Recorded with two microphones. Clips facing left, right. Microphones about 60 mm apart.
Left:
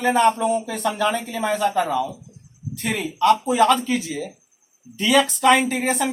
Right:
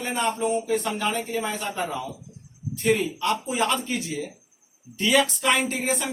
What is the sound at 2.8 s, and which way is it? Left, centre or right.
Speech, left.